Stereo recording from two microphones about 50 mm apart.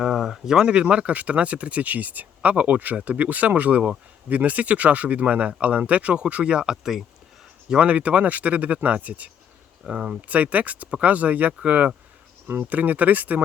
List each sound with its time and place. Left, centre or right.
0.0 s speech: centre
7.7 s speech: right